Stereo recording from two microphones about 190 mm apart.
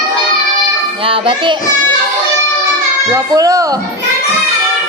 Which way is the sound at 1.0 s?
30° right (ahead or behind).